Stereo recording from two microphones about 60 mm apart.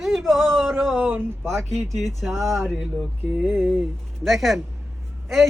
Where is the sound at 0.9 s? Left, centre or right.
Right.